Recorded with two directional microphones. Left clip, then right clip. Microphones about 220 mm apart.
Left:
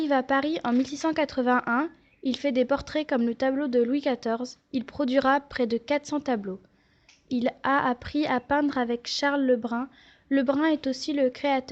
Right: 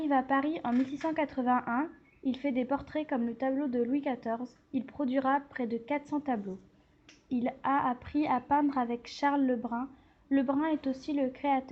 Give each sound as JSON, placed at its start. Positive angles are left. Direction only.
{"t": 0.0, "sound": "speech", "side_deg": 45}